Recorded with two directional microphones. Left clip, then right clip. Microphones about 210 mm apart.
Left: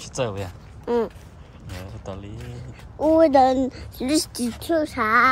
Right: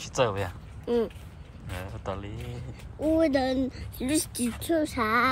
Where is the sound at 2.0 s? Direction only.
15° left (ahead or behind).